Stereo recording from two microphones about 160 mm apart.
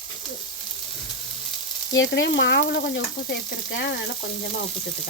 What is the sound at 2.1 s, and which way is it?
Frying, 90° left.